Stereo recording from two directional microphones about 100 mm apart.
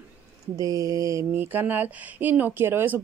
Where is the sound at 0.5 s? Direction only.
35° right (ahead or behind).